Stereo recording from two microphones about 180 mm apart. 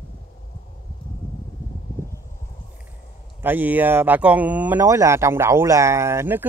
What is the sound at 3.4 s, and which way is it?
Speech, 10° right (ahead or behind).